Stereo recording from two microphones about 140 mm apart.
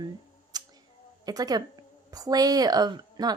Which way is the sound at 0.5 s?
30° right (ahead or behind).